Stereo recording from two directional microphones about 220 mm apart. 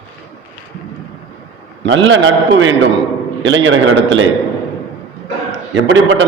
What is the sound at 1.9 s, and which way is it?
A man's voice, 55° right (ahead or behind).